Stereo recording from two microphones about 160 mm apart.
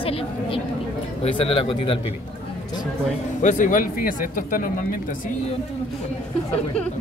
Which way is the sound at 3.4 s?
50° left (ahead or behind).